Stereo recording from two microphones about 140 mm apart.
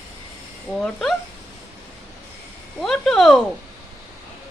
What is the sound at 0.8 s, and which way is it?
Speech, 5° left (ahead or behind).